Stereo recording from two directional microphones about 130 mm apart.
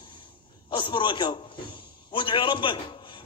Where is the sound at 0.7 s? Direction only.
40° left (ahead or behind).